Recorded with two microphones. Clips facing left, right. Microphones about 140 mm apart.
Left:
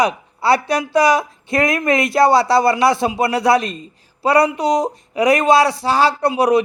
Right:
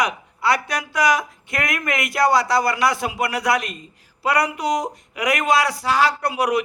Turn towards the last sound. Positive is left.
turn(degrees=25)  # may be behind; listen again after turning